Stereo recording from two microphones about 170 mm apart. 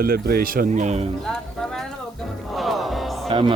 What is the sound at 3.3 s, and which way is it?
Music, 30° right (ahead or behind).